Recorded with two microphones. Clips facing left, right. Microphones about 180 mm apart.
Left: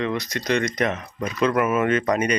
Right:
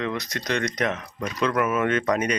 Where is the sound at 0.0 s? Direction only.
Centre (ahead or behind).